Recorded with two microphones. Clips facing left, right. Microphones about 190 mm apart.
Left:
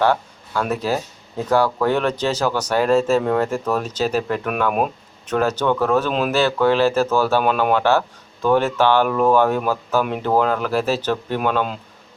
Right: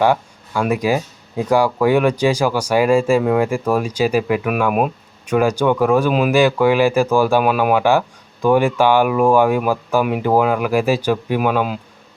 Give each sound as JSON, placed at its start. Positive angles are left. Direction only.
{"t": 0.0, "sound": "speech", "side_deg": -10}